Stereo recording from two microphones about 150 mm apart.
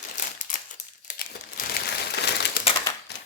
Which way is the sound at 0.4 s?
60° left (ahead or behind).